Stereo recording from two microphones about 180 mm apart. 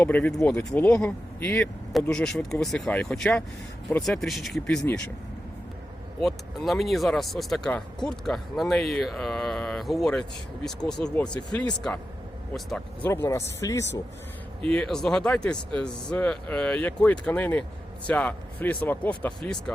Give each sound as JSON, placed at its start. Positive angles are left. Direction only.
{"t": 0.0, "sound": "speech", "side_deg": 10}
{"t": 6.1, "sound": "speech", "side_deg": 0}
{"t": 12.5, "sound": "speech", "side_deg": 0}
{"t": 14.6, "sound": "speech", "side_deg": 5}